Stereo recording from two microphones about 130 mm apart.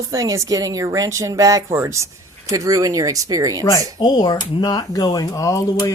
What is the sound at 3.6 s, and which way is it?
Speech, 30° left (ahead or behind).